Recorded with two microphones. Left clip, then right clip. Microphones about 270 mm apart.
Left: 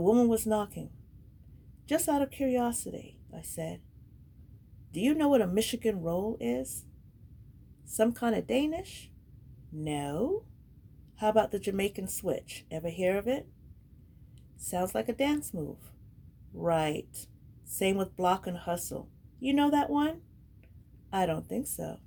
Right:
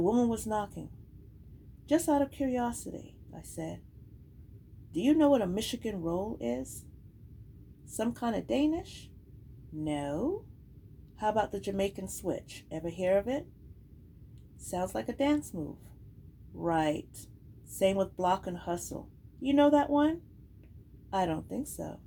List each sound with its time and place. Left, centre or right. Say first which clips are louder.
0.0 s speech: left 4 dB; left
1.9 s speech: right 1 dB; left
4.9 s speech: right 1 dB; left
7.9 s speech: left 5 dB; left
14.7 s speech: left 3 dB; left
16.6 s speech: left 1 dB; left
21.2 s speech: left 1 dB; left